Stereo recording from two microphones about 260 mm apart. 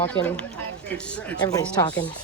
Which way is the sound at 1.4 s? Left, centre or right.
Centre.